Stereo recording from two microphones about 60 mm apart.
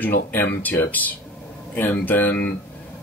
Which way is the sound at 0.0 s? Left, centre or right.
Left.